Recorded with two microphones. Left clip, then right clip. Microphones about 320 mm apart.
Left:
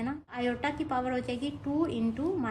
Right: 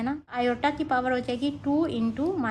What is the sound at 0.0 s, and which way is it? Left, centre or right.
A woman's voice, right.